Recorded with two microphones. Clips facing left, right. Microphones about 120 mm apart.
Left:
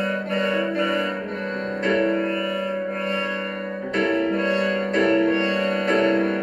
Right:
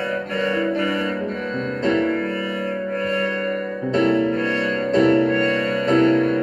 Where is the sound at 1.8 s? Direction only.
25° right (ahead or behind).